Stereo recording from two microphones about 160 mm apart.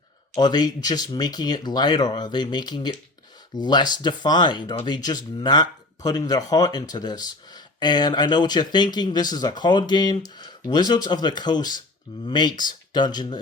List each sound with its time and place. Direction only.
0.3 s speech: 25° left (ahead or behind)